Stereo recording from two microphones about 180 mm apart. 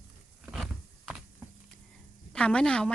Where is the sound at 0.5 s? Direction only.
Centre (ahead or behind).